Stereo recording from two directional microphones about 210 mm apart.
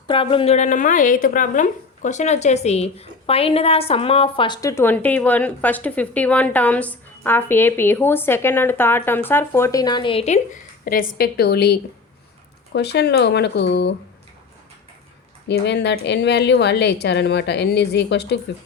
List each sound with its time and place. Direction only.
0.1 s a woman's voice: 25° left (ahead or behind); by 13.9 s 55° left (ahead or behind)
15.4 s a woman's voice: 55° left (ahead or behind)